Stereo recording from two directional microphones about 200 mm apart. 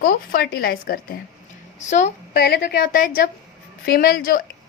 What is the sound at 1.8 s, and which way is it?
Speech, 35° left (ahead or behind).